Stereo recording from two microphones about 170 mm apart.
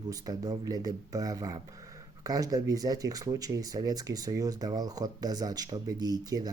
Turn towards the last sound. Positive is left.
turn(degrees=-25)  # may be behind; listen again after turning